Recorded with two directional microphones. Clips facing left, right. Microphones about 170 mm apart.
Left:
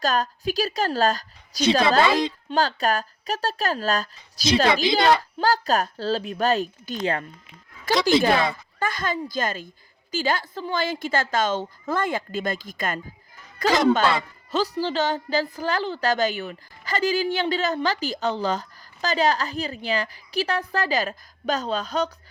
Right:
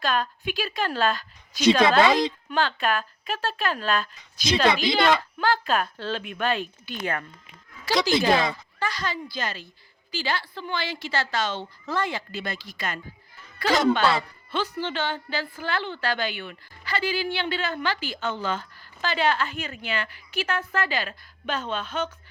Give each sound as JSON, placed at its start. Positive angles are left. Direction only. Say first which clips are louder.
{"t": 0.0, "sound": "a woman's voice", "louder": "left 3 dB", "side_deg": 40}
{"t": 7.0, "sound": "speech", "louder": "left 4 dB", "side_deg": 25}
{"t": 7.9, "sound": "a woman's voice", "louder": "left 2 dB", "side_deg": 50}